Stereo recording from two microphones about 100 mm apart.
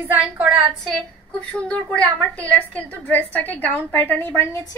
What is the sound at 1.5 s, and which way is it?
A woman's voice, 10° left (ahead or behind).